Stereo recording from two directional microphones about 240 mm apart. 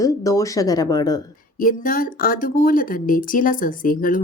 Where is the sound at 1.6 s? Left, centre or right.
Left.